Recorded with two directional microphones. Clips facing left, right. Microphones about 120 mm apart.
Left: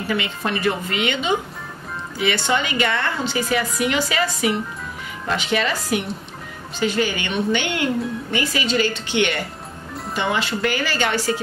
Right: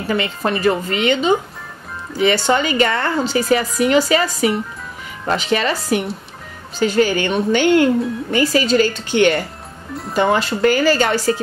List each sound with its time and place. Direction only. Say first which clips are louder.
0.1 s a woman's voice: right 5 dB; 40° right (ahead or behind)
6.8 s a woman's voice: right 6 dB; 40° right (ahead or behind)